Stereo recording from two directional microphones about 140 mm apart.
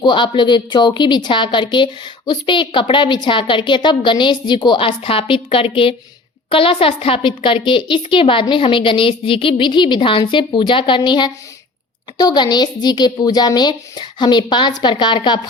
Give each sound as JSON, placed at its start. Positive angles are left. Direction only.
{"t": 0.0, "sound": "a woman's voice", "side_deg": 35}